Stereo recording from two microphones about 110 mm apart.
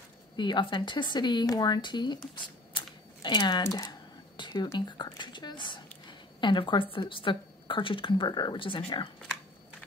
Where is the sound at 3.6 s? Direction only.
30° left (ahead or behind); by 9.0 s 45° left (ahead or behind).